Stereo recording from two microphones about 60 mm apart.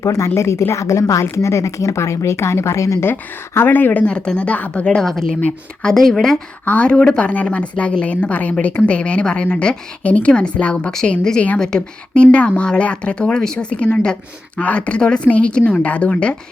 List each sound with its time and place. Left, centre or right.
0.0 s speech: left
0.3 s speech: left
3.0 s a woman's voice: left; by 6.4 s centre
6.7 s a woman's voice: left